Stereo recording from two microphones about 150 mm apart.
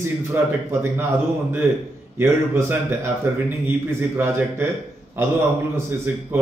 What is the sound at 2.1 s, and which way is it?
A man's voice, 15° right (ahead or behind).